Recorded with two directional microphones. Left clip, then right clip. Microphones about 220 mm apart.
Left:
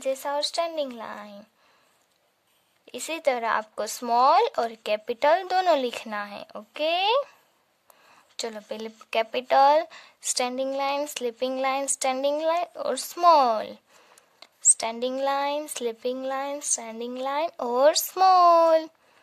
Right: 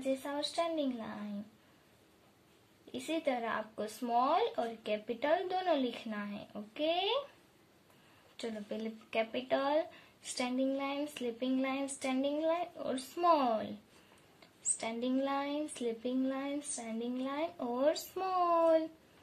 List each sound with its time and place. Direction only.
0.0 s speech: 50° left (ahead or behind)
2.8 s speech: 50° left (ahead or behind)
8.4 s speech: 50° left (ahead or behind)
14.8 s speech: 50° left (ahead or behind)